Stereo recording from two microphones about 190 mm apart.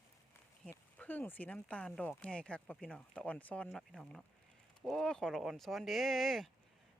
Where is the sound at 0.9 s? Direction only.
10° left (ahead or behind).